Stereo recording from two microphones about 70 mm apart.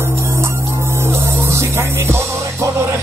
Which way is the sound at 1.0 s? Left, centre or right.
Right.